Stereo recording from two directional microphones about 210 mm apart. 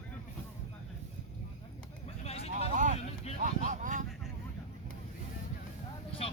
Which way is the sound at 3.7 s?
35° right (ahead or behind).